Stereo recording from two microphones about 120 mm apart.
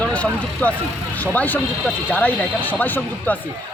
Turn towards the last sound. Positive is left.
turn(degrees=15)  # may be behind; listen again after turning